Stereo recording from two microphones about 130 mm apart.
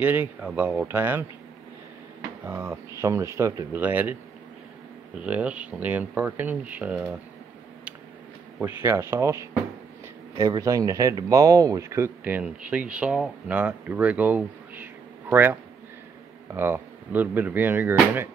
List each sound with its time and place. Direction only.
0.0 s speech: 15° right (ahead or behind)
2.4 s speech: 20° right (ahead or behind)
3.8 s speech: 15° right (ahead or behind)
8.5 s speech: 15° right (ahead or behind)
12.3 s speech: 10° right (ahead or behind)
16.5 s speech: 15° right (ahead or behind)